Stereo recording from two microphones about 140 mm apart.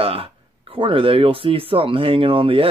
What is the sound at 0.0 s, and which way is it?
Speech, 40° right (ahead or behind).